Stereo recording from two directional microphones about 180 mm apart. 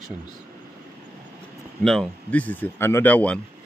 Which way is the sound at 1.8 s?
Centre (ahead or behind).